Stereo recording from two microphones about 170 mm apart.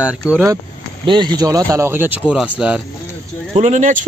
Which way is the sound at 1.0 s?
25° right (ahead or behind).